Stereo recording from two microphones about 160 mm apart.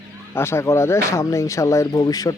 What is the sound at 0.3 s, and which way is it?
Speech, 15° left (ahead or behind).